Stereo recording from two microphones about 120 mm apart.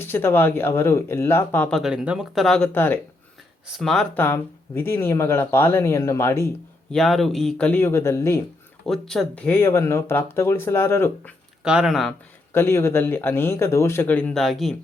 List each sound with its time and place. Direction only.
0.0 s speech: 20° left (ahead or behind)
1.8 s speech: 5° right (ahead or behind)
2.7 s speech: 15° left (ahead or behind)
3.8 s speech: 5° left (ahead or behind)
4.1 s speech: 15° left (ahead or behind)
6.9 s speech: centre (ahead or behind)
7.7 s speech: 20° left (ahead or behind)
8.9 s speech: 5° left (ahead or behind); by 11.3 s 20° left (ahead or behind)
11.6 s speech: 5° right (ahead or behind)
12.5 s speech: 20° left (ahead or behind); by 14.8 s centre (ahead or behind)